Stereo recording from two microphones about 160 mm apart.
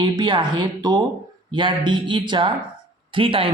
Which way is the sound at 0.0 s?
30° right (ahead or behind).